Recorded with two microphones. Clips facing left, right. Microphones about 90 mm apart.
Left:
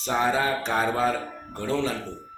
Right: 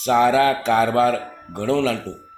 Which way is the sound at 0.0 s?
90° right.